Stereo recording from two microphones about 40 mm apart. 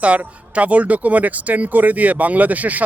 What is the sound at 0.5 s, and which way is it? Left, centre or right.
Speech, right.